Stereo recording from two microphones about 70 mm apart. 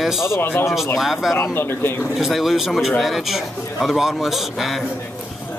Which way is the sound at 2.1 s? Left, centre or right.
Centre.